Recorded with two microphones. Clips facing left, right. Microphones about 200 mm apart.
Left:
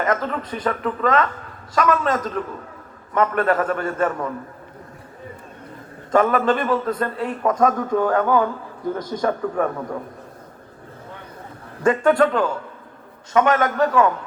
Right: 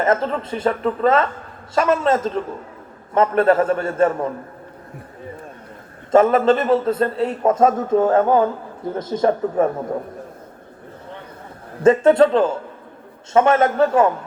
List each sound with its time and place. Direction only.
0.0 s a man's voice: 25° right (ahead or behind)
6.1 s a man's voice: 25° right (ahead or behind)
11.8 s a man's voice: 25° right (ahead or behind)